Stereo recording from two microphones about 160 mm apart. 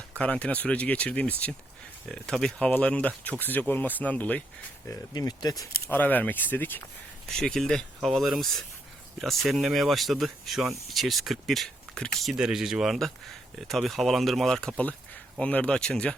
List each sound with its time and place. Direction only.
0.2 s speech: 5° left (ahead or behind)
4.9 s speech: 20° left (ahead or behind)
5.9 s speech: 10° left (ahead or behind)